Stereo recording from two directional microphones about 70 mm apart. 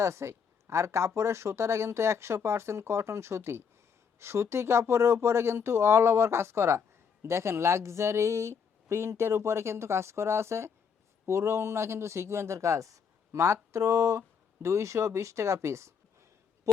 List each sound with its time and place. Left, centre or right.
0.0 s speech: right
16.7 s owl: right